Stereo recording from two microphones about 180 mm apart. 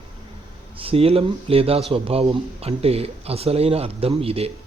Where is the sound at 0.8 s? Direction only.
30° right (ahead or behind).